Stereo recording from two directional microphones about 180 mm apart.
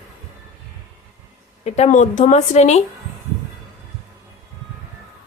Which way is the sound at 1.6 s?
40° left (ahead or behind).